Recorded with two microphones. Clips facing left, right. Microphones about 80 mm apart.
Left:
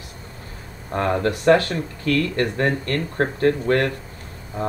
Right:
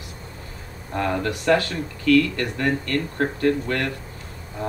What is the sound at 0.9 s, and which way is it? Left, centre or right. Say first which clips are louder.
Speech: left 3 dB; left.